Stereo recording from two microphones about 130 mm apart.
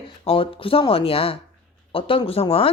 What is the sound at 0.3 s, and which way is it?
A woman's voice, 45° left (ahead or behind).